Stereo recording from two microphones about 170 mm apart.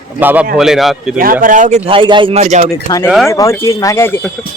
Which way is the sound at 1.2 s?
55° right (ahead or behind).